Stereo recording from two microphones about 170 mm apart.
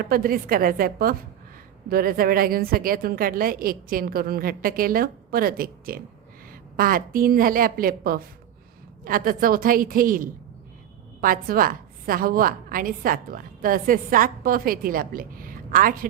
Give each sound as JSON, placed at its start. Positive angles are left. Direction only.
{"t": 0.0, "sound": "a woman's voice", "side_deg": -60}